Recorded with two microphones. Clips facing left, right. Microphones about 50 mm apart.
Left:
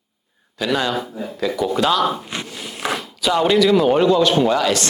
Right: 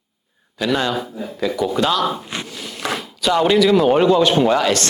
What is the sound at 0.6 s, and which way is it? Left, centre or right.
Speech, centre.